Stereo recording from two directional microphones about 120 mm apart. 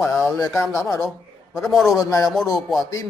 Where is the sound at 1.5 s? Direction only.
Centre (ahead or behind).